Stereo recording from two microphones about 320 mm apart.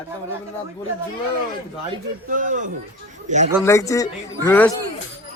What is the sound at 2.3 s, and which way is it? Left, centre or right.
Speech, right.